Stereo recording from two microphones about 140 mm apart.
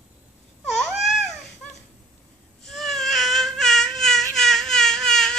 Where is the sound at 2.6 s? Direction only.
Centre (ahead or behind).